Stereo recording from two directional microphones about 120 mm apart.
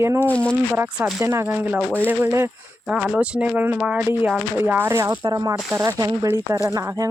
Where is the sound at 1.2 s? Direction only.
20° right (ahead or behind).